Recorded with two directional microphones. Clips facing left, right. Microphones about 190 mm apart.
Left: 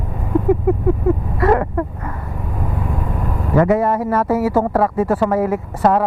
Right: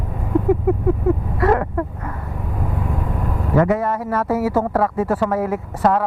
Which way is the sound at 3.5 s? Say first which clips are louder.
Left 3 dB; 15° left (ahead or behind).